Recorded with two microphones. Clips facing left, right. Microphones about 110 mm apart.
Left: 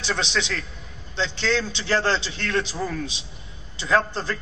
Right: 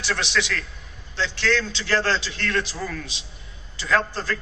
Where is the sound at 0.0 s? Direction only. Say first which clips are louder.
Right 1 dB; 15° left (ahead or behind).